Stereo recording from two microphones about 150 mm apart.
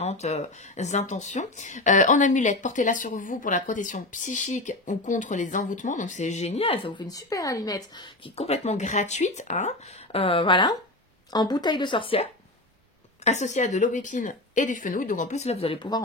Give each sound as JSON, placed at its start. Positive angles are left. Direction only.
{"t": 0.0, "sound": "speech", "side_deg": 50}
{"t": 8.4, "sound": "a woman's voice", "side_deg": 45}
{"t": 13.2, "sound": "a woman's voice", "side_deg": 50}